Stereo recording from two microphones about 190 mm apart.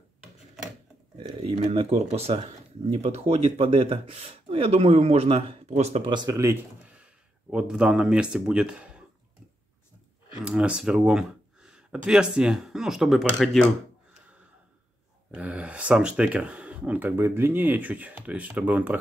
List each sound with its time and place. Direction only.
1.5 s speech: 30° right (ahead or behind)
6.1 s speech: 15° right (ahead or behind)
10.4 s speech: 5° right (ahead or behind)
15.3 s speech: 5° right (ahead or behind)